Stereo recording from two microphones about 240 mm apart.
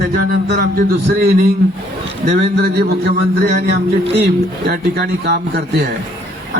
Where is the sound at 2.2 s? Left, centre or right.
Right.